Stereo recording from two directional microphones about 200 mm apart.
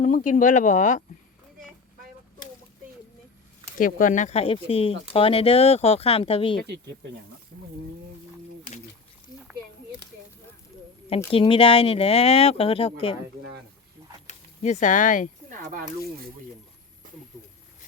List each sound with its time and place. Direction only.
0.0 s speech: 40° left (ahead or behind)
3.8 s speech: 45° left (ahead or behind); by 6.6 s 25° left (ahead or behind)
11.3 s speech: 25° left (ahead or behind)
14.3 s speech: 35° left (ahead or behind)